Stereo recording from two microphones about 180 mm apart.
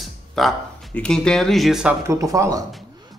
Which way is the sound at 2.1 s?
15° right (ahead or behind).